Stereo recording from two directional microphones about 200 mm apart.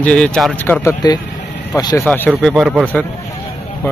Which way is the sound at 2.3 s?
Centre (ahead or behind).